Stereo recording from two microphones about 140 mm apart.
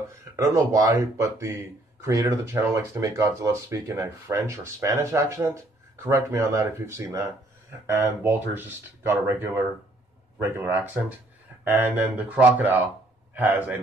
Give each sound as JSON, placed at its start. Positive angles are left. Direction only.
{"t": 0.4, "sound": "speech", "side_deg": -25}